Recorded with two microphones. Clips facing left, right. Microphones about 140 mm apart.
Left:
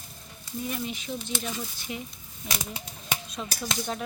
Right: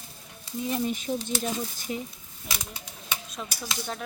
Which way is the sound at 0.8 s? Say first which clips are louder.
Right 5 dB; 45° right (ahead or behind).